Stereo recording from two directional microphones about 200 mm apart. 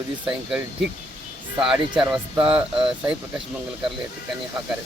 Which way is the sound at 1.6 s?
5° right (ahead or behind).